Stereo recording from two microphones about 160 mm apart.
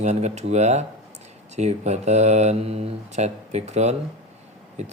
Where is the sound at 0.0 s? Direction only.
45° right (ahead or behind).